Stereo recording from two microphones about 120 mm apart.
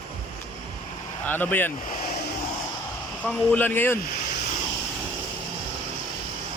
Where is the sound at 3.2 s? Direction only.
10° left (ahead or behind).